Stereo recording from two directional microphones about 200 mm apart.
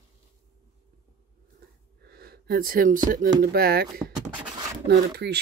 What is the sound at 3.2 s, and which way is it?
Speech, 40° right (ahead or behind).